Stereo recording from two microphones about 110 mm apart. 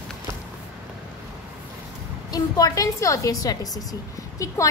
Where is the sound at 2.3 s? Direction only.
35° left (ahead or behind).